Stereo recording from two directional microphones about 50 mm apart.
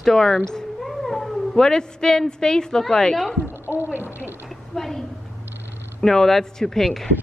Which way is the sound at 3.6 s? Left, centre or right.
Right.